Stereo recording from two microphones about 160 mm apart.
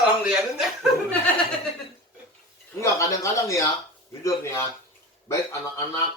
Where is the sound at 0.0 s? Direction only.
5° right (ahead or behind).